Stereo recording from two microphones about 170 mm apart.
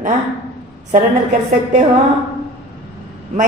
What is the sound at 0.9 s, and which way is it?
Speech, 50° right (ahead or behind).